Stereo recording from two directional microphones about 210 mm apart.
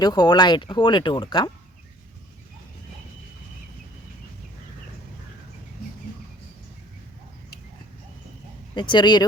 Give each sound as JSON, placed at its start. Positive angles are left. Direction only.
{"t": 0.0, "sound": "speech", "side_deg": 20}
{"t": 8.7, "sound": "speech", "side_deg": 20}